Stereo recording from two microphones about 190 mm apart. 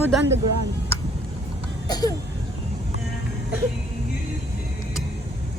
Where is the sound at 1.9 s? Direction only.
20° left (ahead or behind).